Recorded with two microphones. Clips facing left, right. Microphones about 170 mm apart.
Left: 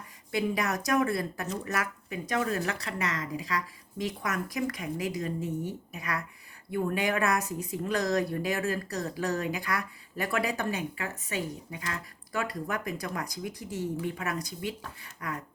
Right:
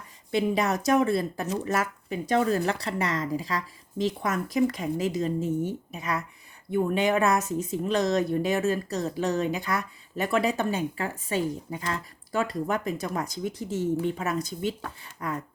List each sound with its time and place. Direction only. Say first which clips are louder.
0.3 s speech: right 4 dB; 25° right (ahead or behind)